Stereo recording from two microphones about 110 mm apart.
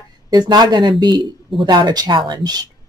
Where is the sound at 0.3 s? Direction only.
40° right (ahead or behind).